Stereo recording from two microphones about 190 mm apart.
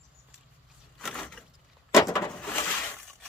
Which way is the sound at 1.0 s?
Centre (ahead or behind).